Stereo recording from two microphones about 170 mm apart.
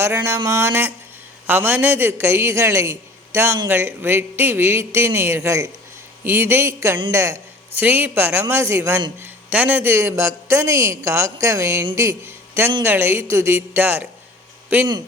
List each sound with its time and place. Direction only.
0.0 s a man's voice: 15° right (ahead or behind)